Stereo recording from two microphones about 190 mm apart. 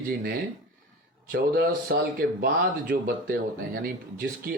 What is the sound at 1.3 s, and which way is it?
Speech, 55° right (ahead or behind).